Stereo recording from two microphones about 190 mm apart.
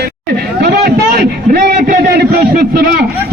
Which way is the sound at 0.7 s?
55° right (ahead or behind).